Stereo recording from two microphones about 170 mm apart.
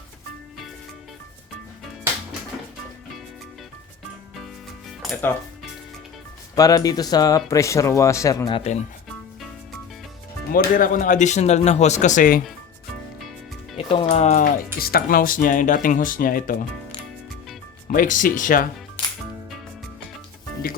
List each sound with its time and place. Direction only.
6.6 s speech: 20° left (ahead or behind)
10.5 s speech: 55° left (ahead or behind)
13.7 s speech: 35° left (ahead or behind)
14.8 s speech: 60° left (ahead or behind)
17.8 s speech: 50° left (ahead or behind)